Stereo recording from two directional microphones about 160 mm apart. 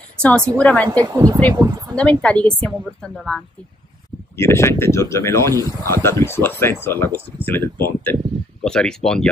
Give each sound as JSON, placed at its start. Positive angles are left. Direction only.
{"t": 0.6, "sound": "speech", "side_deg": 5}
{"t": 0.8, "sound": "speech", "side_deg": -25}
{"t": 2.0, "sound": "a woman's voice", "side_deg": 5}
{"t": 4.4, "sound": "a woman's voice", "side_deg": 15}